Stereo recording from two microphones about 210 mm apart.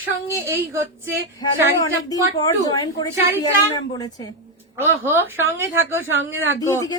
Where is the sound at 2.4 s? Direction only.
20° left (ahead or behind).